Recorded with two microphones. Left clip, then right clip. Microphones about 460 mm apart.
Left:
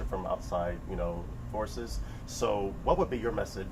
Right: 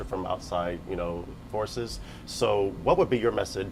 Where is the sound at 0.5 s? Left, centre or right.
Right.